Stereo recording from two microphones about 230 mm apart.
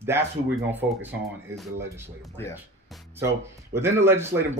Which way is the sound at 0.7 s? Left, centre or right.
Centre.